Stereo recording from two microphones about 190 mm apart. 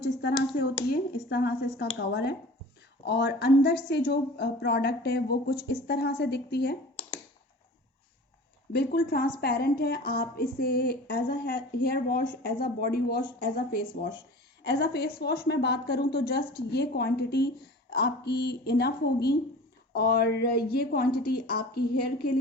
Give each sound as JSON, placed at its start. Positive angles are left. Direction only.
{"t": 0.6, "sound": "a woman's voice", "side_deg": 50}
{"t": 8.7, "sound": "a woman's voice", "side_deg": 55}